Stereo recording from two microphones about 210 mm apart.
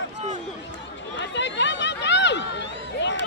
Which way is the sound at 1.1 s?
60° left (ahead or behind).